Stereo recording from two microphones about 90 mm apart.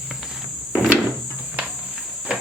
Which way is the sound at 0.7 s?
15° right (ahead or behind).